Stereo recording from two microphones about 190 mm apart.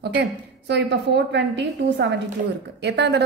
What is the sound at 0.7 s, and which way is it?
A woman's voice, 65° right (ahead or behind).